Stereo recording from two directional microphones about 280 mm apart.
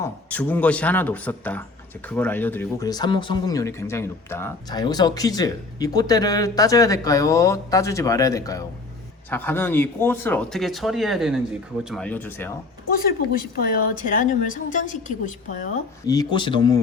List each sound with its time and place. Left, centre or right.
0.0 s speech: centre
12.9 s a woman's voice: left
16.0 s speech: centre